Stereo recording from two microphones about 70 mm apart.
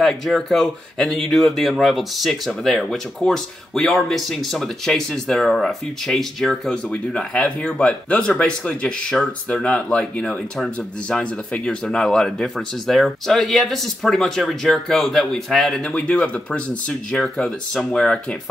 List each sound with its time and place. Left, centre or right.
0.0 s speech: centre
17.2 s speech: centre